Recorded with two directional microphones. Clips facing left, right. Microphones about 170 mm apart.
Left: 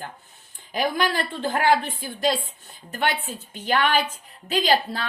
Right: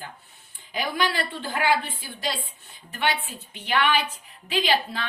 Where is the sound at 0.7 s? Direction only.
50° left (ahead or behind).